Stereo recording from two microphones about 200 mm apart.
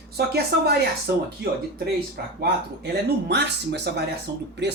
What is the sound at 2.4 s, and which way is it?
A woman's voice, 55° right (ahead or behind).